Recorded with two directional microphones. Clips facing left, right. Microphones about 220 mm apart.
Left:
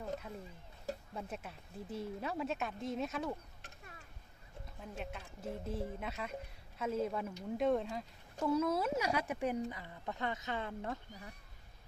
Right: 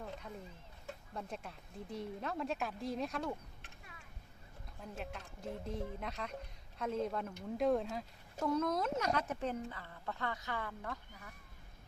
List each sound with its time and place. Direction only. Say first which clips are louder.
1.1 s a woman's voice: left 1 dB; 5° left (ahead or behind)
3.6 s a sound: left 2 dB; 40° left (ahead or behind)
4.8 s a woman's voice: even; centre (ahead or behind); by 11.0 s 25° left (ahead or behind)